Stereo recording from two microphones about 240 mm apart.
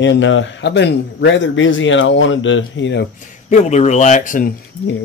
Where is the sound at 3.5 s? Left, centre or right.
Left.